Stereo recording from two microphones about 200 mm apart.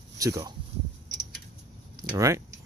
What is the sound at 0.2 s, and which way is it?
Speech, 15° right (ahead or behind).